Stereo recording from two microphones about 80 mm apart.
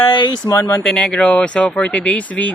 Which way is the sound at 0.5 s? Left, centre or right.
Left.